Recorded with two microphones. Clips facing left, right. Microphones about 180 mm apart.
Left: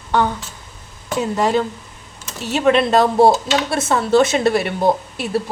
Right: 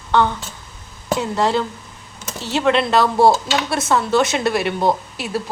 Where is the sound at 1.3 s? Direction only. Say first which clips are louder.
Left 2 dB; 15° left (ahead or behind).